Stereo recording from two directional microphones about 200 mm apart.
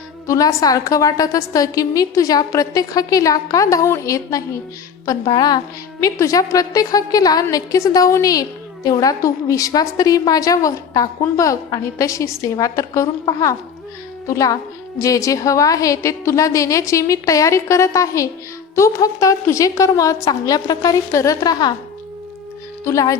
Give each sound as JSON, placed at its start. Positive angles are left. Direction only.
{"t": 0.3, "sound": "a woman's voice", "side_deg": 15}
{"t": 22.8, "sound": "a woman's voice", "side_deg": 15}